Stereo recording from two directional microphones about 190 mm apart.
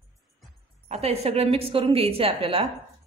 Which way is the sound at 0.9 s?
30° right (ahead or behind).